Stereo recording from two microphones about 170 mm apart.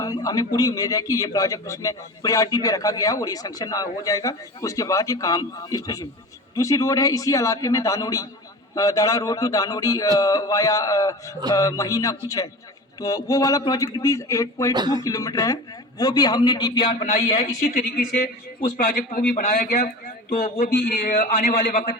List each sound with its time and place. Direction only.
0.0 s a man's voice: 20° left (ahead or behind)
14.7 s speech: 25° right (ahead or behind)
15.0 s a man's voice: 20° left (ahead or behind)
17.6 s a man's voice: 55° left (ahead or behind)